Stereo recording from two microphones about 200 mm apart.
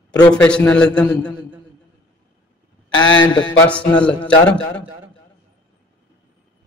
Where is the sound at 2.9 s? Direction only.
70° left (ahead or behind).